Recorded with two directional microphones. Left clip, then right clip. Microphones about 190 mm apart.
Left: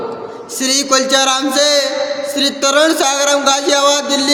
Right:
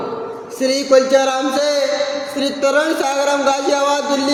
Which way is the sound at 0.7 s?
20° left (ahead or behind).